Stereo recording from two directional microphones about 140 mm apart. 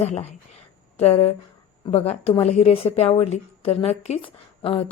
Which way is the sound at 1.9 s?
50° left (ahead or behind).